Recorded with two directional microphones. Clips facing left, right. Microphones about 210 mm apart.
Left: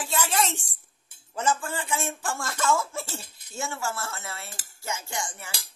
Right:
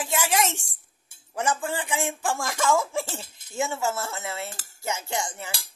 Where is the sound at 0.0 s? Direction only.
15° right (ahead or behind).